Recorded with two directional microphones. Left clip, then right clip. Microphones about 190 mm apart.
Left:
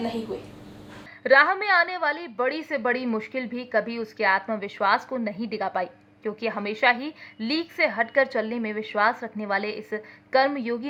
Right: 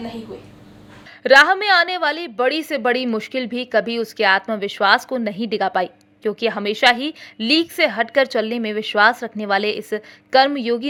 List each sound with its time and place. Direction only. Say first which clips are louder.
0.0 s a woman's voice: left 2 dB; centre (ahead or behind)
1.2 s a woman's voice: right 6 dB; 35° right (ahead or behind)